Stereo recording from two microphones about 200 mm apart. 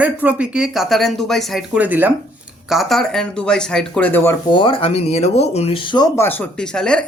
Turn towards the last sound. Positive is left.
turn(degrees=5)  # may be behind; listen again after turning